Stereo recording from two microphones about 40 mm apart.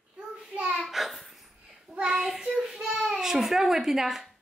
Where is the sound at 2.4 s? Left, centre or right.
Centre.